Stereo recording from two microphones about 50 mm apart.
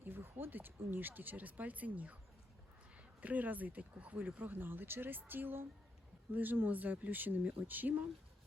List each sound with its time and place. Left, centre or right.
0.0 s speech: right
3.2 s speech: right